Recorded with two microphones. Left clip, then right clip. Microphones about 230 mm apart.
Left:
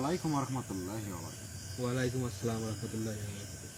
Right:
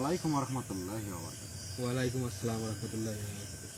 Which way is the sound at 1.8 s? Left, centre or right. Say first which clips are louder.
Even; centre.